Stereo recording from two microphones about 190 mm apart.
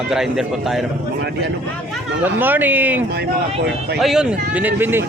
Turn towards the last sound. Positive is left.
turn(degrees=-10)  # may be behind; listen again after turning